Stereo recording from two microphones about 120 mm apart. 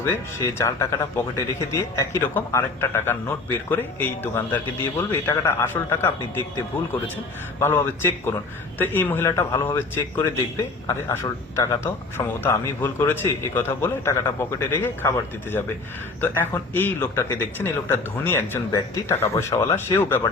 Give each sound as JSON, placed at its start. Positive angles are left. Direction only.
{"t": 0.0, "sound": "a man's voice", "side_deg": 25}
{"t": 7.6, "sound": "a man's voice", "side_deg": 20}
{"t": 11.0, "sound": "a man's voice", "side_deg": 20}